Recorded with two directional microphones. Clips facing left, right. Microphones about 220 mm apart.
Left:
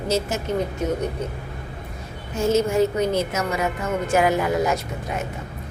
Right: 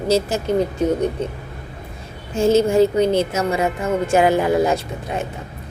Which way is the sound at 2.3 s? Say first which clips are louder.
Right 5 dB; 30° right (ahead or behind).